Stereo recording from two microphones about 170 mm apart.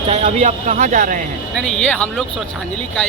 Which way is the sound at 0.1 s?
40° right (ahead or behind).